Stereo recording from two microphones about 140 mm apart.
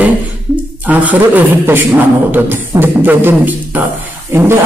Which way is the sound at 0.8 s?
10° right (ahead or behind).